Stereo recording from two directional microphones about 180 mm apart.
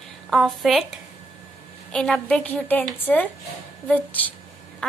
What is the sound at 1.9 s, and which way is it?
A woman's voice, 5° left (ahead or behind).